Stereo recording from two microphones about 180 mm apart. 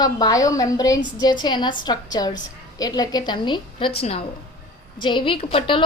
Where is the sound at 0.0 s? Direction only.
20° left (ahead or behind).